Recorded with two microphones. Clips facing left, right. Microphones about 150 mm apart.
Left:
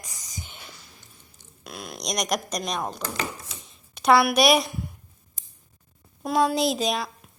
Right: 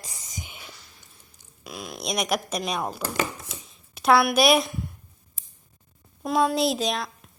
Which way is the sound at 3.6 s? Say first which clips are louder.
Left 1 dB; centre (ahead or behind).